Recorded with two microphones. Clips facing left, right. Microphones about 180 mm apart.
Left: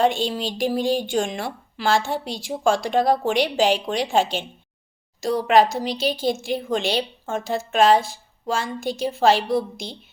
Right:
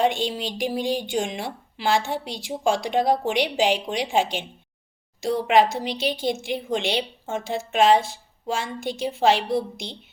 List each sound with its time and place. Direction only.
0.0 s speech: 20° right (ahead or behind)